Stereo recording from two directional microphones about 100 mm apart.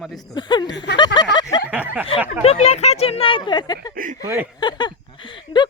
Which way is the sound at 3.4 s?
45° left (ahead or behind).